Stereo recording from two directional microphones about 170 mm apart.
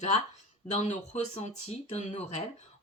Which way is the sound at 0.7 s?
40° left (ahead or behind).